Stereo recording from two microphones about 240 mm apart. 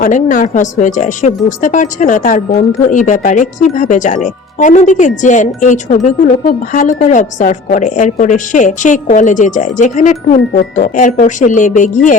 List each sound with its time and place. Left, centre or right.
0.0 s speech: left